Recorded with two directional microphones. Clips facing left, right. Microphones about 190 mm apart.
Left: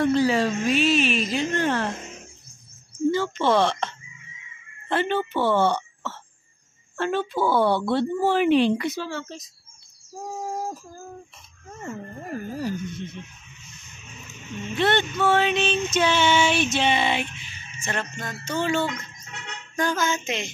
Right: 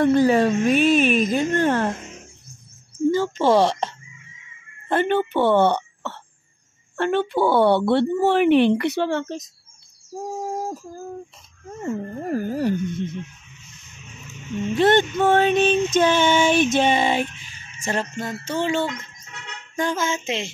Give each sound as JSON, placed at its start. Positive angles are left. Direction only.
{"t": 0.0, "sound": "music", "side_deg": -50}
{"t": 3.1, "sound": "speech", "side_deg": -40}
{"t": 4.8, "sound": "speech", "side_deg": -50}
{"t": 12.4, "sound": "speech", "side_deg": -70}
{"t": 14.7, "sound": "music", "side_deg": -45}